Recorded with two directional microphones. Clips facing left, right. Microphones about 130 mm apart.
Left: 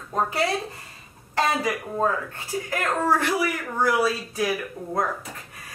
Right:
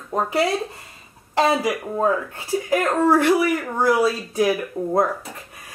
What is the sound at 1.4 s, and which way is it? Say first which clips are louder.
A woman's voice: right 5 dB; 20° right (ahead or behind).